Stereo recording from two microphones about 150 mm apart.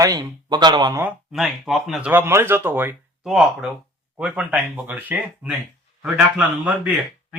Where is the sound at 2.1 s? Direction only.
15° right (ahead or behind).